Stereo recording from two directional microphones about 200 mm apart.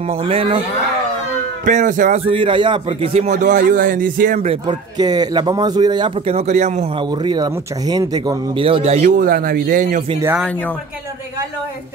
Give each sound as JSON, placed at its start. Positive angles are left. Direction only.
{"t": 0.1, "sound": "speech", "side_deg": -30}
{"t": 1.7, "sound": "a man's voice", "side_deg": -40}
{"t": 4.6, "sound": "speech", "side_deg": -20}
{"t": 7.1, "sound": "speech", "side_deg": -20}